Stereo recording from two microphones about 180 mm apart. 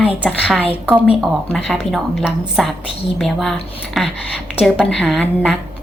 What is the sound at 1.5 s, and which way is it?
A woman's voice, centre (ahead or behind).